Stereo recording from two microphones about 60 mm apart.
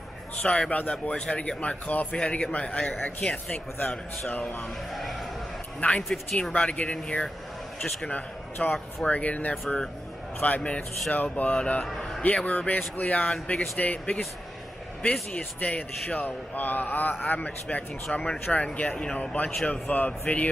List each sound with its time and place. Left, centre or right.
0.4 s a man's voice: centre
4.3 s speech: left
5.8 s a man's voice: centre
8.1 s a man's voice: left
11.5 s a man's voice: centre
15.3 s a man's voice: left
19.6 s a man's voice: left